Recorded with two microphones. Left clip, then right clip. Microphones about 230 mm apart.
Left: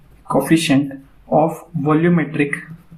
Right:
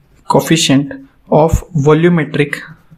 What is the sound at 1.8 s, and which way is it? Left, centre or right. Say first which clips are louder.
Speech: right 6 dB; right.